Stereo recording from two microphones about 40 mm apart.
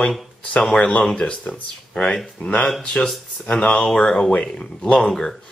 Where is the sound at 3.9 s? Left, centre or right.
Centre.